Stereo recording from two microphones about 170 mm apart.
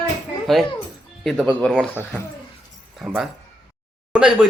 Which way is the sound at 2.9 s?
Centre (ahead or behind).